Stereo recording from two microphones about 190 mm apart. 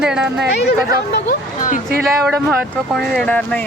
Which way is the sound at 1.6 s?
45° left (ahead or behind).